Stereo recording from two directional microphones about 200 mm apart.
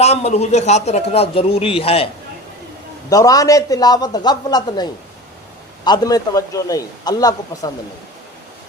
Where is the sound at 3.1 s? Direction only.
15° left (ahead or behind).